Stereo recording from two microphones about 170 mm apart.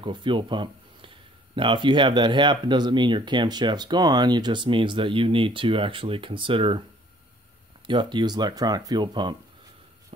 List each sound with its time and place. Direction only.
0.0 s speech: 30° right (ahead or behind)
7.8 s speech: 30° right (ahead or behind)